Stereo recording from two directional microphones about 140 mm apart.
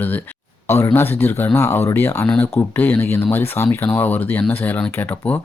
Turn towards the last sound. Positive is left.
turn(degrees=15)  # may be behind; listen again after turning